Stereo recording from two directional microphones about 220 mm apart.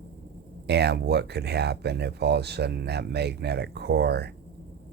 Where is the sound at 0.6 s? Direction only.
50° right (ahead or behind).